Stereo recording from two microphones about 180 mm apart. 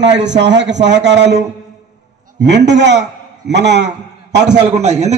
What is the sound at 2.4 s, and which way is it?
A man's voice, 75° right (ahead or behind).